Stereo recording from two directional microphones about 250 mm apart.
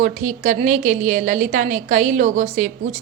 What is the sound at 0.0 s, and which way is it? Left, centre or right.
A woman's voice, right.